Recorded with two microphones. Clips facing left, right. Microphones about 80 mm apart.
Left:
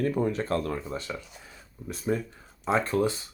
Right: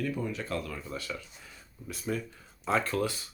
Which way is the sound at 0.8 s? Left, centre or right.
Left.